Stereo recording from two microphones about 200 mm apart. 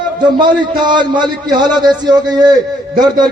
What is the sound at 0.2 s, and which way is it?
A man's voice, 20° right (ahead or behind).